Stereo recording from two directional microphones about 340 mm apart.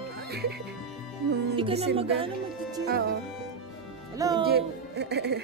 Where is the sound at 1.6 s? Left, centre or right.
Centre.